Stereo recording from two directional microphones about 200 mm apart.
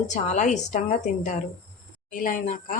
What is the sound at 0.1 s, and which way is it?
Speech, 35° left (ahead or behind).